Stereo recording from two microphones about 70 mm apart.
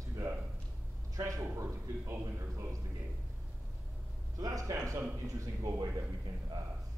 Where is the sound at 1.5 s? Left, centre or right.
Right.